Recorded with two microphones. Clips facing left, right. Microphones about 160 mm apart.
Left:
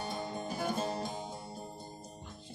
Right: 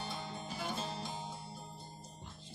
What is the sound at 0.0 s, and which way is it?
Music, 45° left (ahead or behind).